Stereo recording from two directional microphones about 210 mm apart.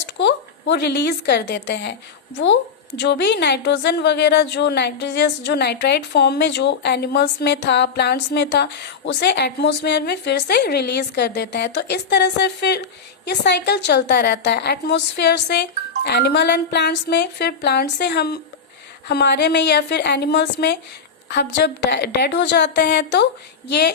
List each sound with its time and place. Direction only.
0.0 s a woman's voice: 55° left (ahead or behind)